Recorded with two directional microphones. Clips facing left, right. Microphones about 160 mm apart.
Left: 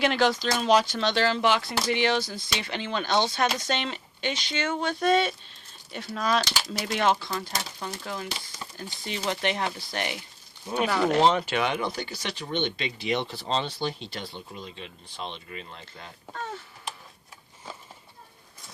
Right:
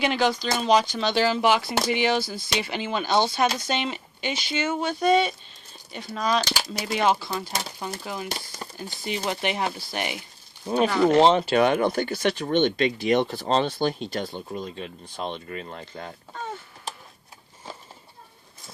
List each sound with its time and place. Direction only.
0.0 s speech: centre (ahead or behind)
11.2 s speech: 25° right (ahead or behind)
11.5 s speech: 45° right (ahead or behind)